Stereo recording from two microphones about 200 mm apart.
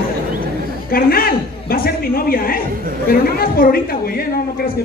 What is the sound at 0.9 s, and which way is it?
A man's voice, 50° left (ahead or behind).